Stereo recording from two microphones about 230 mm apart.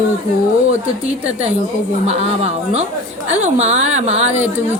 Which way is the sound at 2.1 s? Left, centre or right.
Right.